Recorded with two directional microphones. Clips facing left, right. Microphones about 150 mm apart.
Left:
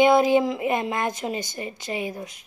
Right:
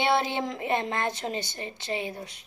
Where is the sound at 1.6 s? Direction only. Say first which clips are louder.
Left 3 dB; 25° right (ahead or behind).